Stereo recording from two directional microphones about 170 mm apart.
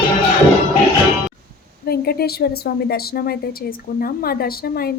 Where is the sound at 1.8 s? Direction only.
65° left (ahead or behind).